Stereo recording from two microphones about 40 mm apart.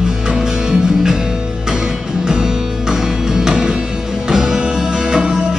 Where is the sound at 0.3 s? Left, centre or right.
Centre.